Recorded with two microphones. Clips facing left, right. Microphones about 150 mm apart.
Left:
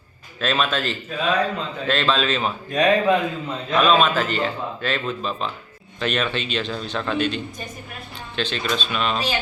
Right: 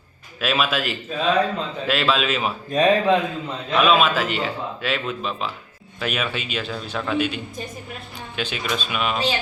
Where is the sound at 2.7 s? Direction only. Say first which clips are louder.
Right 1 dB; 30° right (ahead or behind).